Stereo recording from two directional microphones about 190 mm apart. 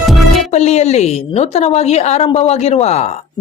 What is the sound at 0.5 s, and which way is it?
A woman's voice, 35° left (ahead or behind).